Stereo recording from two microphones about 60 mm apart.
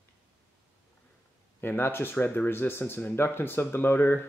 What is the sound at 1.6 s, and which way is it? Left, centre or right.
Speech, left.